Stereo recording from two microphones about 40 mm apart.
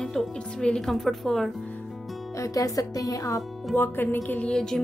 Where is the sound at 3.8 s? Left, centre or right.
Left.